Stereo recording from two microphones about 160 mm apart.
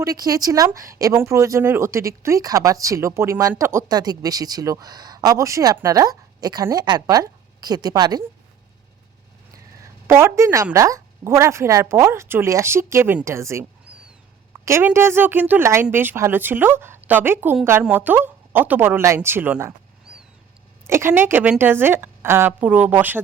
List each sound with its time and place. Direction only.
0.0 s speech: 20° right (ahead or behind)
10.1 s a woman's voice: 15° right (ahead or behind)
13.8 s a sound: 5° right (ahead or behind)
14.6 s a woman's voice: 15° right (ahead or behind)
20.1 s a sound: 5° right (ahead or behind)
20.8 s a woman's voice: 15° right (ahead or behind)